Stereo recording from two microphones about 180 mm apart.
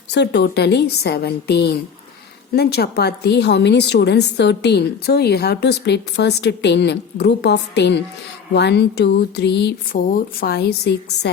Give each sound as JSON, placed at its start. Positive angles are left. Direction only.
{"t": 0.1, "sound": "a woman's voice", "side_deg": 70}
{"t": 9.9, "sound": "a woman's voice", "side_deg": 55}